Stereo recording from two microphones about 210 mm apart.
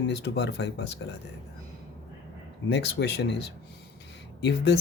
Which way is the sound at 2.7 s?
55° left (ahead or behind).